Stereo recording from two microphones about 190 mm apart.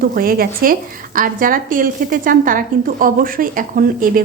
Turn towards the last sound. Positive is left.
turn(degrees=-50)  # may be behind; listen again after turning